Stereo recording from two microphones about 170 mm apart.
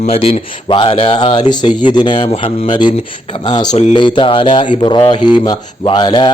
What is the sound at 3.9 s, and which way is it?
Speech, 30° left (ahead or behind).